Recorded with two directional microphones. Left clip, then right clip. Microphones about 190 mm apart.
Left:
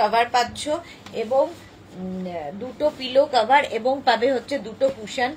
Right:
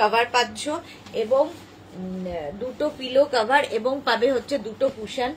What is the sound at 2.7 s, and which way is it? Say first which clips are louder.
A woman's voice: left 2 dB; 20° right (ahead or behind).